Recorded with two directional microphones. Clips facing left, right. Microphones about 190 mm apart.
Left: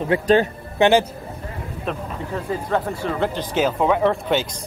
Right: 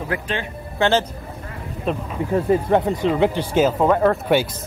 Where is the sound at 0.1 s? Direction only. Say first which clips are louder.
Left 7 dB; 25° left (ahead or behind).